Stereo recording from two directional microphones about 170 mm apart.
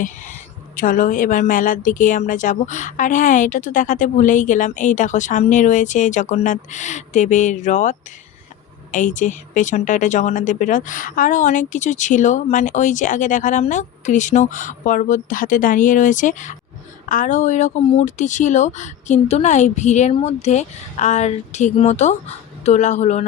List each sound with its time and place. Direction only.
0.0 s a woman's voice: 50° left (ahead or behind)